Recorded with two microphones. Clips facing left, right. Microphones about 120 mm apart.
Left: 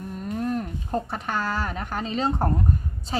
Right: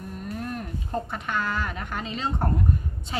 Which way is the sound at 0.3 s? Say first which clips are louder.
Left 7 dB; 35° left (ahead or behind).